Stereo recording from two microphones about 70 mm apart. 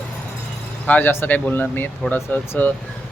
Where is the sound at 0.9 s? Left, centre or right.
Left.